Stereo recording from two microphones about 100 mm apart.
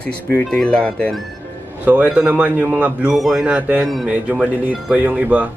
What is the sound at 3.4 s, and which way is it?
Speech, 15° right (ahead or behind).